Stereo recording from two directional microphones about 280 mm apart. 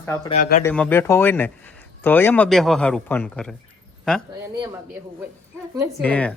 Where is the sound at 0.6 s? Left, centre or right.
Centre.